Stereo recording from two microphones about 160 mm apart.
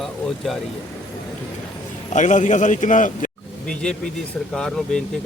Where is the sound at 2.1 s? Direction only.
50° left (ahead or behind).